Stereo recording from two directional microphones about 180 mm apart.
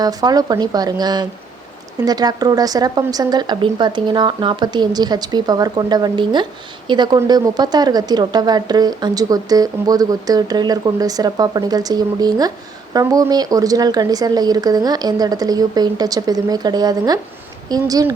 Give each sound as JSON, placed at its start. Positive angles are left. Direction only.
{"t": 0.0, "sound": "speech", "side_deg": -20}